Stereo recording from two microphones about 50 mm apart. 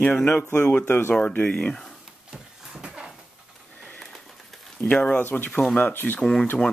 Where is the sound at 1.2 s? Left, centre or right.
Left.